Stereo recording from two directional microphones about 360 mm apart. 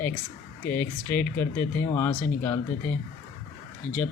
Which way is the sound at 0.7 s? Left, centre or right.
Centre.